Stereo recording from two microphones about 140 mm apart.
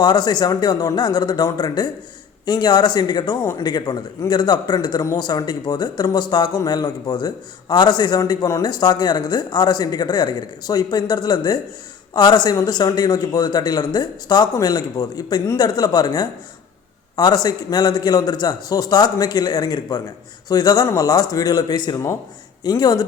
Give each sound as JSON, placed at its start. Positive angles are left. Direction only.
{"t": 0.0, "sound": "speech", "side_deg": 30}